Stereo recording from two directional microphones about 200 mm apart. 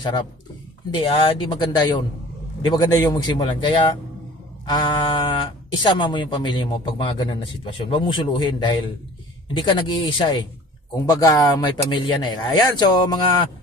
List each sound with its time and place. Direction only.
0.9 s speech: 20° left (ahead or behind)